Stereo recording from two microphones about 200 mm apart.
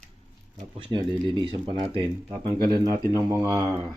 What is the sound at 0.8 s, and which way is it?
Speech, 25° right (ahead or behind).